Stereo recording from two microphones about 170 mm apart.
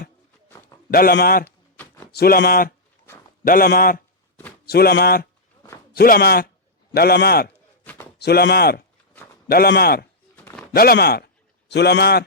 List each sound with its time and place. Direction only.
0.9 s speech: 60° left (ahead or behind)
1.5 s a sound: 10° left (ahead or behind)
2.1 s speech: 65° left (ahead or behind)
10.3 s a sound: 10° left (ahead or behind)
10.8 s speech: 65° left (ahead or behind)
11.7 s speech: 80° left